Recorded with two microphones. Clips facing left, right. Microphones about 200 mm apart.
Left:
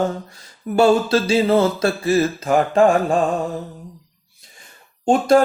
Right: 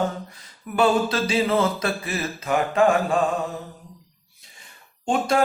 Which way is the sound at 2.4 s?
40° left (ahead or behind).